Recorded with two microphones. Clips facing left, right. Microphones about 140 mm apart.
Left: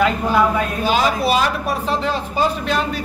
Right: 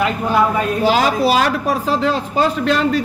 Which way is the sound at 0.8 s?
90° right.